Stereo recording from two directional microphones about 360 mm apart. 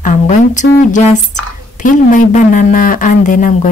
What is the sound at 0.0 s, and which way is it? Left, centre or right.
Speech, left.